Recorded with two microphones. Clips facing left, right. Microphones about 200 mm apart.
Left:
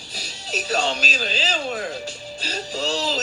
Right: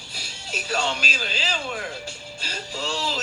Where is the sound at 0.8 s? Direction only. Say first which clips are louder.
Left 3 dB; 40° left (ahead or behind).